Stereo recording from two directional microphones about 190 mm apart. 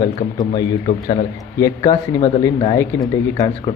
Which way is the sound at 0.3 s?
20° left (ahead or behind).